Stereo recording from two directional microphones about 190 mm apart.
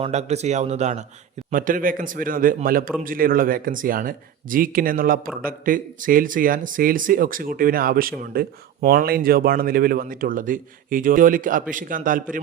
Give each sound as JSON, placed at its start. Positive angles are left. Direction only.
{"t": 0.0, "sound": "speech", "side_deg": -35}